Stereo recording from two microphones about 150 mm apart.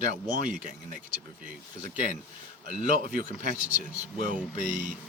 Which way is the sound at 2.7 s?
65° right (ahead or behind).